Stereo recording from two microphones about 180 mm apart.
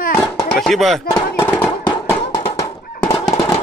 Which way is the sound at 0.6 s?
Centre (ahead or behind).